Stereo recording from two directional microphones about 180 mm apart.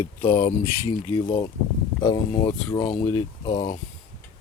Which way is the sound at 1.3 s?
30° left (ahead or behind).